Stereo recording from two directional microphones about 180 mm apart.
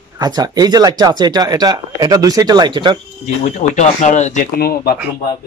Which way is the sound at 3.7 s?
40° left (ahead or behind).